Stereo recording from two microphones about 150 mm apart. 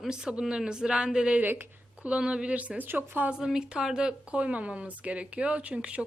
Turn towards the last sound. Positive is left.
turn(degrees=-10)  # may be behind; listen again after turning